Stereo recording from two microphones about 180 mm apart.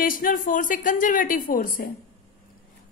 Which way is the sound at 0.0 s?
50° left (ahead or behind).